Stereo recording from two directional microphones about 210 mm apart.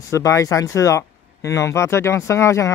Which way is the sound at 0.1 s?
15° left (ahead or behind).